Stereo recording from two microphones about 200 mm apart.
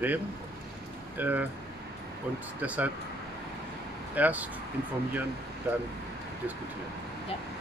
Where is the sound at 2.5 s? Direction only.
5° right (ahead or behind).